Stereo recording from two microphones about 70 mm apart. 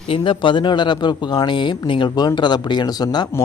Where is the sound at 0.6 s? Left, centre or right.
Left.